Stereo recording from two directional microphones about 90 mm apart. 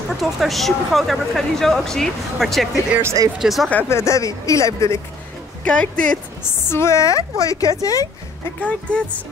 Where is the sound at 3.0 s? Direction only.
40° right (ahead or behind).